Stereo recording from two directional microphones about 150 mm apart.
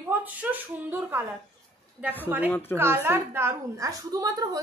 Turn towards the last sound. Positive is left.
turn(degrees=-25)  # may be behind; listen again after turning